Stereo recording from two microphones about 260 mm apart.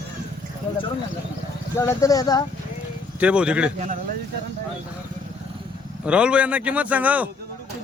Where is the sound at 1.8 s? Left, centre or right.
Centre.